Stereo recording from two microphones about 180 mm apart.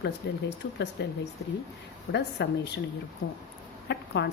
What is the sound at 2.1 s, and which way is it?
Speech, 70° left (ahead or behind).